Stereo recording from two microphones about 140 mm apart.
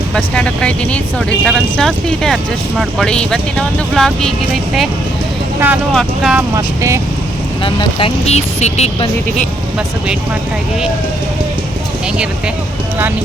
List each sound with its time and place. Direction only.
0.1 s speech: 5° left (ahead or behind)
5.5 s speech: 15° right (ahead or behind)
5.9 s speech: 5° left (ahead or behind)
7.6 s speech: 40° left (ahead or behind)